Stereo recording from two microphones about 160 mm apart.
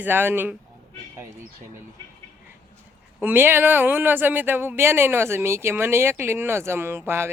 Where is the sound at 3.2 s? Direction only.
15° right (ahead or behind).